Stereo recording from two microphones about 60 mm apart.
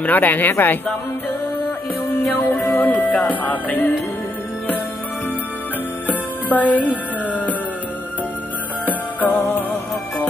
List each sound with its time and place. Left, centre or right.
0.0 s speech: left
2.1 s music: left
6.0 s music: left
8.8 s music: left